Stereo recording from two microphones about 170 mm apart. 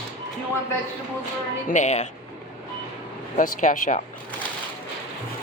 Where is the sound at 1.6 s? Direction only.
45° left (ahead or behind).